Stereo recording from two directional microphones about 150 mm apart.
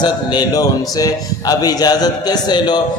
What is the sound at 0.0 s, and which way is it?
A man's voice, 30° left (ahead or behind).